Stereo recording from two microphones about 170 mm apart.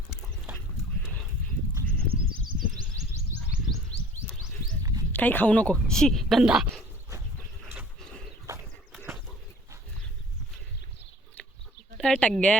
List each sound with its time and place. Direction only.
1.8 s a sound: 55° right (ahead or behind)
4.8 s dog: 20° right (ahead or behind)
5.1 s a woman's voice: 10° left (ahead or behind)
8.5 s horse: 20° right (ahead or behind)
11.9 s a woman's voice: 5° left (ahead or behind)